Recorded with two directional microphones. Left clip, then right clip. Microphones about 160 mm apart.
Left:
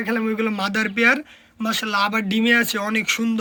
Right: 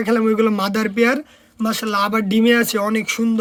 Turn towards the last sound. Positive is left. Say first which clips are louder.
# right 2 dB
turn(degrees=-50)  # may be behind; listen again after turning